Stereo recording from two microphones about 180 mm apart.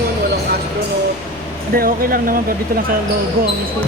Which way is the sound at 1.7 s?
55° right (ahead or behind).